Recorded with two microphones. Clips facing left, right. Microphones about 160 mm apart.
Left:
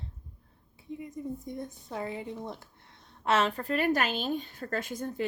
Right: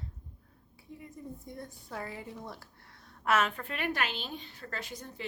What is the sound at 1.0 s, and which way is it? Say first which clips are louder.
A woman's voice: left 7 dB; 20° left (ahead or behind).